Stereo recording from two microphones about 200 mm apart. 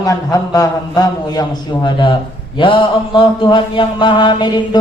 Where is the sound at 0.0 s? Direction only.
20° left (ahead or behind).